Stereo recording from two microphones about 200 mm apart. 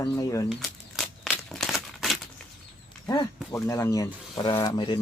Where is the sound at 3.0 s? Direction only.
20° left (ahead or behind).